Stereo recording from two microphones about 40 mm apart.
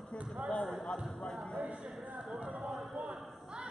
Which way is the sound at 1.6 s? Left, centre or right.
Right.